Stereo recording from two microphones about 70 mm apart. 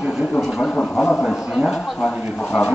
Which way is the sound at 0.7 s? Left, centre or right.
Centre.